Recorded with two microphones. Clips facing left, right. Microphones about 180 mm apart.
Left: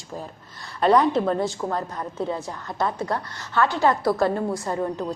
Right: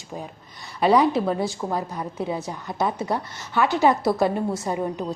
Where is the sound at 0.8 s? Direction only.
5° right (ahead or behind).